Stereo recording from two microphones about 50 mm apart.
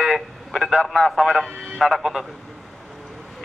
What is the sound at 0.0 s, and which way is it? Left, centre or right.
Radio, centre.